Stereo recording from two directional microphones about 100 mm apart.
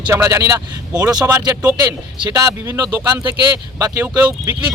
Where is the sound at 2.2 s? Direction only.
40° right (ahead or behind).